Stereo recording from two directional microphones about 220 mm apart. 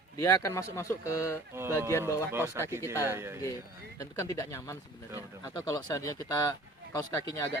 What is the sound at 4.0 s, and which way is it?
A man's voice, 15° left (ahead or behind).